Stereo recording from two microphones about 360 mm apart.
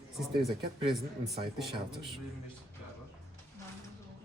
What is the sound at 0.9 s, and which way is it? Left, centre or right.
Speech, centre.